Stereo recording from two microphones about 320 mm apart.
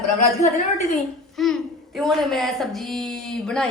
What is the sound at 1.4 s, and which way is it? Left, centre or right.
A woman's voice, centre.